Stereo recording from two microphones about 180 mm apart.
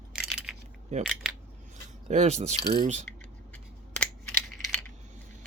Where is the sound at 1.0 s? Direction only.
Centre (ahead or behind).